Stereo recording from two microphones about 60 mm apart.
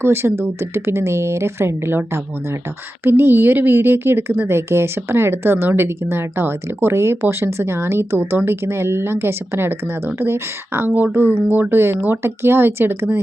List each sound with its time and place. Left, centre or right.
0.0 s a woman's voice: right
10.9 s a woman's voice: right